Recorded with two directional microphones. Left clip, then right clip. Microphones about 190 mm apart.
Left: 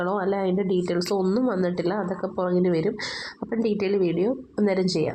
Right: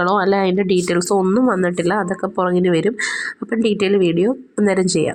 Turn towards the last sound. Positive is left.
turn(degrees=-30)  # may be behind; listen again after turning